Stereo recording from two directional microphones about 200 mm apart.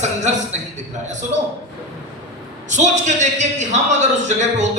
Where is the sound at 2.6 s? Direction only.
35° right (ahead or behind).